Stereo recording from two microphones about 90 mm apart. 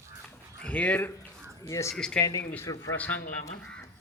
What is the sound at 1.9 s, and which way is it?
Speech, 10° left (ahead or behind).